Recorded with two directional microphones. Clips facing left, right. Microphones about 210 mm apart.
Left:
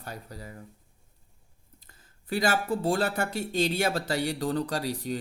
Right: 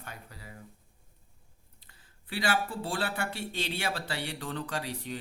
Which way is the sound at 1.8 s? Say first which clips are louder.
Left 3 dB; 45° left (ahead or behind).